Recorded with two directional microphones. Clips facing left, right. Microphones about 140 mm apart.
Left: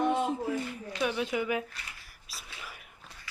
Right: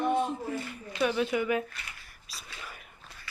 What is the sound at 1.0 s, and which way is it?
Speech, 10° left (ahead or behind).